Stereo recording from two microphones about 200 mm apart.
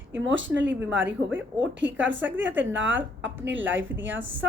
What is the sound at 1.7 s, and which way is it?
Speech, 65° right (ahead or behind).